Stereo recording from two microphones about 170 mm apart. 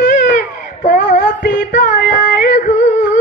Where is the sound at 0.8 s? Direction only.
50° left (ahead or behind).